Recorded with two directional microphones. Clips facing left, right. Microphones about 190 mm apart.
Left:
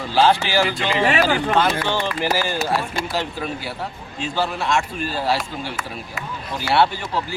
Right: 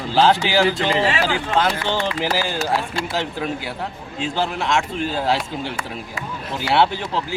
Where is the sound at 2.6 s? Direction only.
20° right (ahead or behind).